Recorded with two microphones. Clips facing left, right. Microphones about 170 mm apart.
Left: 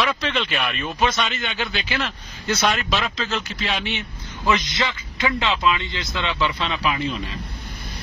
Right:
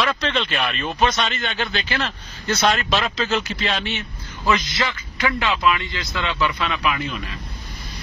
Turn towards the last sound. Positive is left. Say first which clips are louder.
# even
turn(degrees=35)  # may be behind; listen again after turning